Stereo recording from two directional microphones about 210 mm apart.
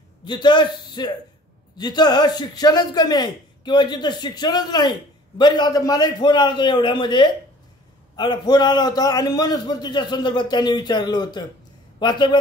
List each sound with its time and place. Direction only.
0.2 s a man's voice: 20° left (ahead or behind)